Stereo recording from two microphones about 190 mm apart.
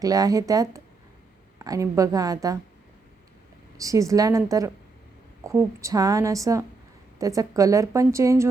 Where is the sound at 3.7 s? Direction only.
15° right (ahead or behind).